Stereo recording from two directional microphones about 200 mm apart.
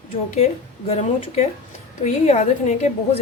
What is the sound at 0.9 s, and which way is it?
A woman's voice, 30° left (ahead or behind).